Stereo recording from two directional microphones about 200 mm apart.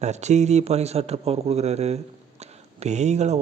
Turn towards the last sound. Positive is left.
turn(degrees=-35)  # may be behind; listen again after turning